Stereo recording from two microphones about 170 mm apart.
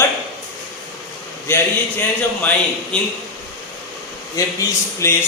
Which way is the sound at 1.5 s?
15° left (ahead or behind).